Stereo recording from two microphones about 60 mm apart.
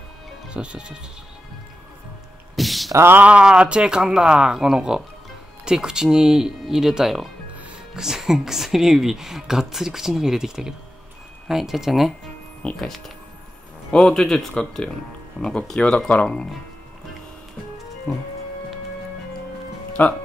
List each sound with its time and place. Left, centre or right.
0.5 s speech: centre
2.5 s a sound: centre
3.3 s speech: centre
18.1 s speech: left
20.0 s speech: left